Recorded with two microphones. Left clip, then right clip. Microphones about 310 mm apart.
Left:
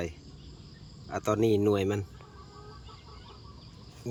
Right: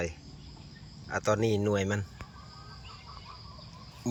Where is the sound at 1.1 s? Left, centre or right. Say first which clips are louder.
Left 1 dB; centre.